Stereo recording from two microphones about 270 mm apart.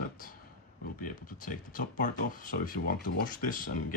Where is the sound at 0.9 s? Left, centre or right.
Left.